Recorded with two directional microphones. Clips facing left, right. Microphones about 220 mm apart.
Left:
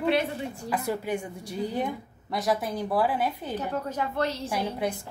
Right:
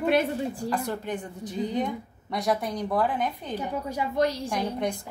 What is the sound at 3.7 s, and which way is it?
Speech, 10° right (ahead or behind).